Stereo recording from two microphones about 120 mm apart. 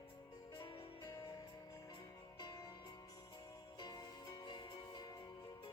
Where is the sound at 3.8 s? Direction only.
30° left (ahead or behind).